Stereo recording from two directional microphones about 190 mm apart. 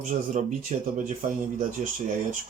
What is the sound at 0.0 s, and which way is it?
Speech, 40° right (ahead or behind).